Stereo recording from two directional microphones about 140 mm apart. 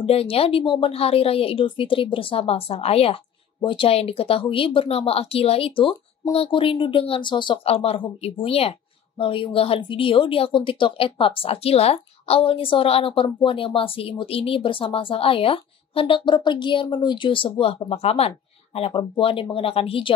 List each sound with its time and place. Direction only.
0.0 s a woman's voice: 40° left (ahead or behind)